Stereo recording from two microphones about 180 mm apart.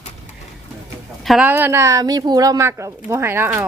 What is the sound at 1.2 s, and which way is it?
A woman's voice, 5° right (ahead or behind).